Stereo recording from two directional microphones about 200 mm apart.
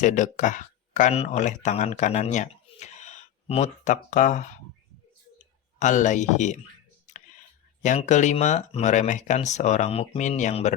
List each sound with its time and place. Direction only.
0.0 s speech: 40° left (ahead or behind)
5.8 s speech: 35° left (ahead or behind)
7.8 s speech: 35° left (ahead or behind)